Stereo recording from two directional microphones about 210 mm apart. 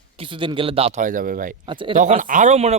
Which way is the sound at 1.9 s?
35° right (ahead or behind).